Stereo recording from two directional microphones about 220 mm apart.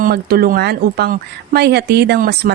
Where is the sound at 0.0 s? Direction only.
45° right (ahead or behind).